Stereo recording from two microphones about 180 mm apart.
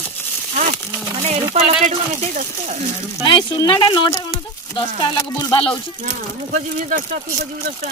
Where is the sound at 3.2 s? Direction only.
25° left (ahead or behind).